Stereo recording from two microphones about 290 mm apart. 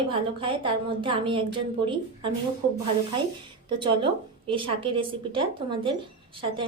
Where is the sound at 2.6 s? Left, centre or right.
Centre.